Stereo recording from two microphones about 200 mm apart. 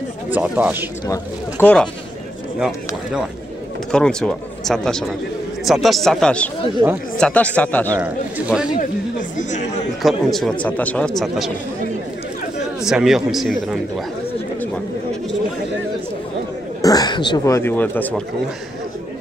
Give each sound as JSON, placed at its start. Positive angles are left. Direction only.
{"t": 0.3, "sound": "a man's voice", "side_deg": -10}
{"t": 1.0, "sound": "speech", "side_deg": 10}
{"t": 3.9, "sound": "speech", "side_deg": 5}
{"t": 6.8, "sound": "speech", "side_deg": -20}
{"t": 7.2, "sound": "speech", "side_deg": 5}
{"t": 7.9, "sound": "a man's voice", "side_deg": -5}
{"t": 9.4, "sound": "speech", "side_deg": 35}
{"t": 10.0, "sound": "speech", "side_deg": 0}
{"t": 12.8, "sound": "speech", "side_deg": 0}
{"t": 16.8, "sound": "a man's voice", "side_deg": 20}